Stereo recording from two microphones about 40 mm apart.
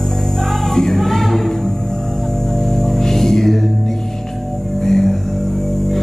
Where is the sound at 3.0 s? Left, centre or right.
Centre.